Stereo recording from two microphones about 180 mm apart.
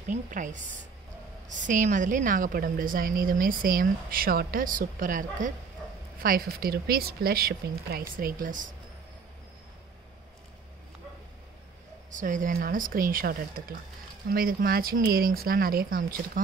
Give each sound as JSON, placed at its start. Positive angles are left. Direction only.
{"t": 0.1, "sound": "a woman's voice", "side_deg": -45}
{"t": 12.1, "sound": "a woman's voice", "side_deg": -45}